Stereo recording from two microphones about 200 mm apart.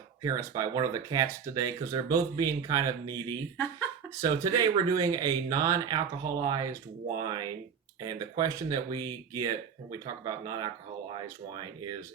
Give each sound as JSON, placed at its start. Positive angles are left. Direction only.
{"t": 0.2, "sound": "speech", "side_deg": -15}